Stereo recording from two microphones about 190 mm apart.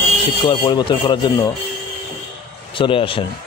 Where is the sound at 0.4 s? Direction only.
25° left (ahead or behind).